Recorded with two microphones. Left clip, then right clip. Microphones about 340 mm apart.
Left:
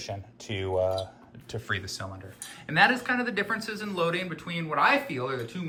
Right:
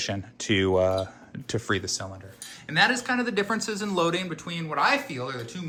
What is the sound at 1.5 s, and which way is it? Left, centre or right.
Speech, centre.